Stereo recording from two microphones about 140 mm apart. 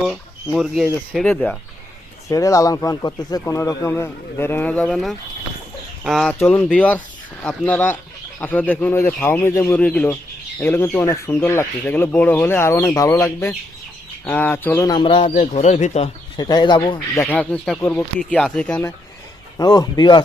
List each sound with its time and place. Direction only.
0.1 s speech: centre (ahead or behind)
2.3 s speech: 25° left (ahead or behind); by 6.3 s centre (ahead or behind)
6.4 s speech: 10° left (ahead or behind)
14.8 s speech: 35° left (ahead or behind)
15.4 s speech: 55° left (ahead or behind)
16.4 s speech: 30° left (ahead or behind)
17.2 s speech: 10° left (ahead or behind)
19.5 s speech: 25° left (ahead or behind)